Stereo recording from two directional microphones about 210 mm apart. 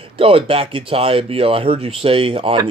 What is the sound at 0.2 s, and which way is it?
Speech, 25° right (ahead or behind).